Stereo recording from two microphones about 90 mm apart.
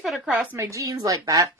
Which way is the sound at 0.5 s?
35° right (ahead or behind).